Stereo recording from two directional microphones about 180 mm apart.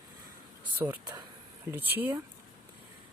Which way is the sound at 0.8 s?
15° right (ahead or behind).